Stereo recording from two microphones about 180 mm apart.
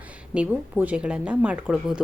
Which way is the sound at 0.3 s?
10° right (ahead or behind).